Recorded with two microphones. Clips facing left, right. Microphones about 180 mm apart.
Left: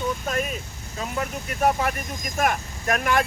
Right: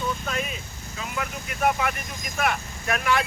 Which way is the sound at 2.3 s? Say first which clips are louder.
Left 2 dB; 45° left (ahead or behind).